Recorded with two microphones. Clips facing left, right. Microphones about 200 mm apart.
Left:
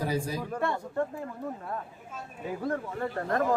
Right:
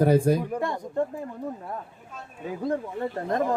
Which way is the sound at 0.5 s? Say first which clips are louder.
Right 2 dB; 15° right (ahead or behind).